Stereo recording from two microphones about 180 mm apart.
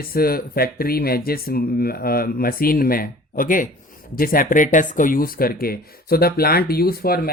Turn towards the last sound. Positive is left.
turn(degrees=55)  # may be behind; listen again after turning